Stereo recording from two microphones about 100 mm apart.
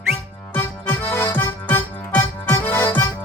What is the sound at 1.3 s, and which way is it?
Music, 20° left (ahead or behind).